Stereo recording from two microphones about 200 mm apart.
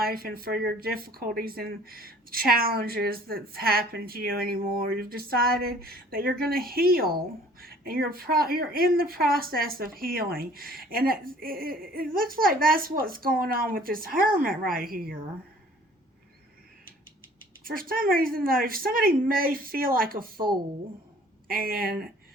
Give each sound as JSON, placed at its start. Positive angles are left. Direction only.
{"t": 0.0, "sound": "speech", "side_deg": -50}
{"t": 17.6, "sound": "speech", "side_deg": -45}